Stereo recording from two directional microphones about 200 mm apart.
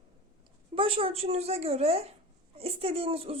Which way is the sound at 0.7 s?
25° right (ahead or behind).